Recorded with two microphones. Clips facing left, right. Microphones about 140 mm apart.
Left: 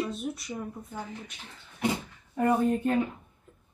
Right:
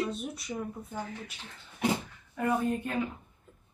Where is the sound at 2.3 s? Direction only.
35° left (ahead or behind).